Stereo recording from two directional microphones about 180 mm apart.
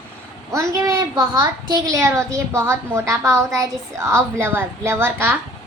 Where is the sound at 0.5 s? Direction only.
20° right (ahead or behind).